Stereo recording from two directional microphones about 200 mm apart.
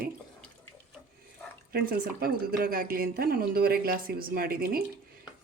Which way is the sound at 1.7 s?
45° right (ahead or behind).